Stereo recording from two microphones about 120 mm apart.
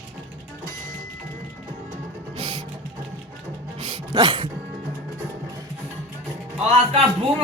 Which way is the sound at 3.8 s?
60° right (ahead or behind).